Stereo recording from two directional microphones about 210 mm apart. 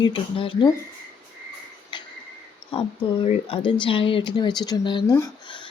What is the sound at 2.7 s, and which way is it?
Speech, 25° left (ahead or behind).